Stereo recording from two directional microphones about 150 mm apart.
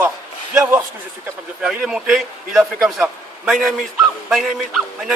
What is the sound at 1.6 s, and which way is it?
A man's voice, 5° right (ahead or behind).